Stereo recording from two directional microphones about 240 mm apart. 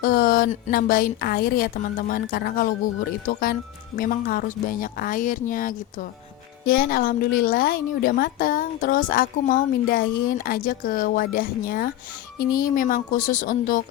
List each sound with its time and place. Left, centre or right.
0.0 s a woman's voice: left